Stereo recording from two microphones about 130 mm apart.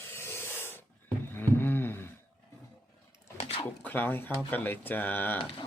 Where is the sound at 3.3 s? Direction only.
50° left (ahead or behind).